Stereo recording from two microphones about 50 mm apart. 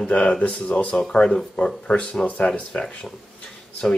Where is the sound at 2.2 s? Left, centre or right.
Left.